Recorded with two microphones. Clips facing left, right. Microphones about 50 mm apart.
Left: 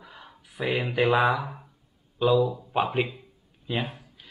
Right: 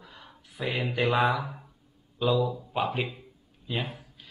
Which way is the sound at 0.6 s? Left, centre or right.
Centre.